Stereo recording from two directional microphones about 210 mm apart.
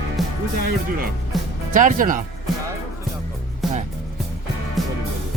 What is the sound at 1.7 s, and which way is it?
Speech, 40° right (ahead or behind).